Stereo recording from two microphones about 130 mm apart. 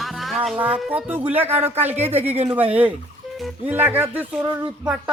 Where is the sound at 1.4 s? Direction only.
55° right (ahead or behind).